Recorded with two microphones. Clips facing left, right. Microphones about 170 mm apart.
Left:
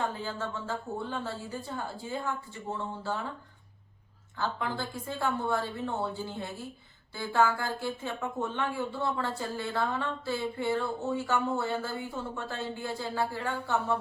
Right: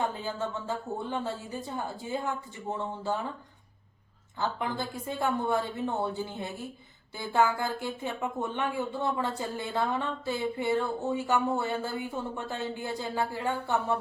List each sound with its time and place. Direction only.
0.0 s speech: 15° right (ahead or behind)
4.4 s speech: 15° right (ahead or behind)